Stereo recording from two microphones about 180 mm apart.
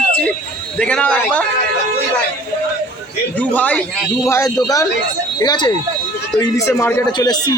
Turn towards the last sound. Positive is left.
turn(degrees=25)  # may be behind; listen again after turning